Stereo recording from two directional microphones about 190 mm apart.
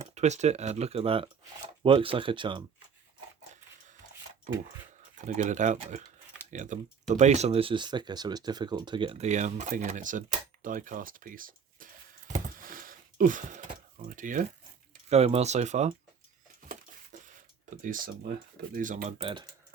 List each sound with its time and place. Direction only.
0.0 s speech: 35° right (ahead or behind)
5.1 s speech: 40° right (ahead or behind)
12.3 s a sound: 45° right (ahead or behind)
15.1 s speech: 35° right (ahead or behind)
16.6 s a sound: 40° right (ahead or behind)
18.7 s speech: 45° right (ahead or behind)
19.2 s speech: 25° right (ahead or behind)